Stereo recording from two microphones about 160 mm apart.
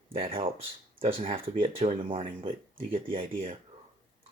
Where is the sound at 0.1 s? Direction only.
35° right (ahead or behind).